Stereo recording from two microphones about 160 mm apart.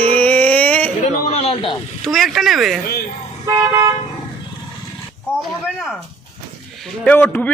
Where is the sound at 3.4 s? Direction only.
20° right (ahead or behind).